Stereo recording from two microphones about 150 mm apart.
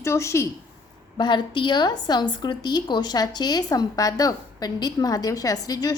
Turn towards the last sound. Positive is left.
turn(degrees=25)  # may be behind; listen again after turning